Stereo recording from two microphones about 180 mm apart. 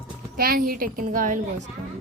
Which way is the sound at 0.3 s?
55° right (ahead or behind).